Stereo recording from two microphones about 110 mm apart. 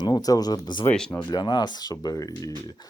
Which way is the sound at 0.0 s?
40° left (ahead or behind).